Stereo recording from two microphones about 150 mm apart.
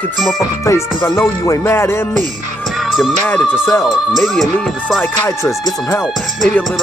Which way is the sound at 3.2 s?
5° left (ahead or behind).